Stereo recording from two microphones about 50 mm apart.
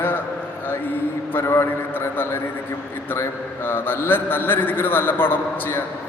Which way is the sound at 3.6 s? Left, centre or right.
Left.